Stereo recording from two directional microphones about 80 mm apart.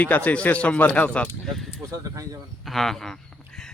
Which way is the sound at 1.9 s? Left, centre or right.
Right.